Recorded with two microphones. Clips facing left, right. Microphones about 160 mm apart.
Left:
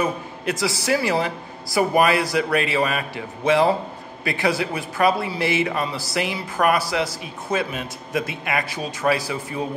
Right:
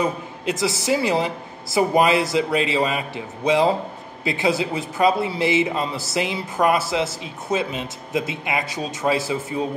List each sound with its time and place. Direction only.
0.0 s a man's voice: 20° right (ahead or behind)